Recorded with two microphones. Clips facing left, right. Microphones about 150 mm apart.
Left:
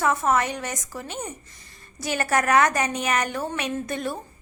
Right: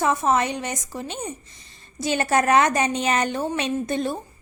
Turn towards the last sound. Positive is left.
turn(degrees=-25)  # may be behind; listen again after turning